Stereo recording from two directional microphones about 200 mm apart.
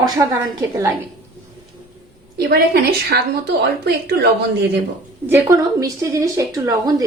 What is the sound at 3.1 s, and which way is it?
Speech, 50° right (ahead or behind).